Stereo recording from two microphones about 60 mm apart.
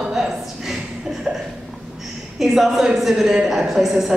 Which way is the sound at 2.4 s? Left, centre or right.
Centre.